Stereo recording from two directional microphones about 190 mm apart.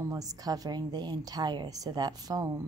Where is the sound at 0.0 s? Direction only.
20° right (ahead or behind).